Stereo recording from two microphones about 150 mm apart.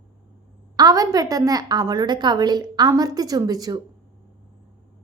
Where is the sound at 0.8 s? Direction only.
25° right (ahead or behind).